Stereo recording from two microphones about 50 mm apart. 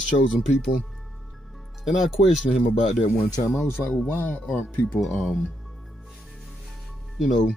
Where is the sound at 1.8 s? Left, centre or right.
Centre.